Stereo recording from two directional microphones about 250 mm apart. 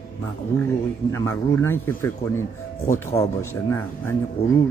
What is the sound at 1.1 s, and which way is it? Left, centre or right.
A man's voice, centre.